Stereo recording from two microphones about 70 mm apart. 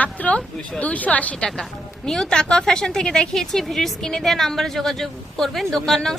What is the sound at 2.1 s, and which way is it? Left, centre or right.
A woman's voice, centre.